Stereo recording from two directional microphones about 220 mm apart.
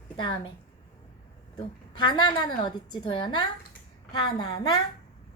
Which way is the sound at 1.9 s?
20° left (ahead or behind).